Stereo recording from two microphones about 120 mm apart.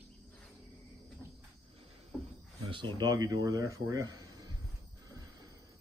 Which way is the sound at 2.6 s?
40° right (ahead or behind).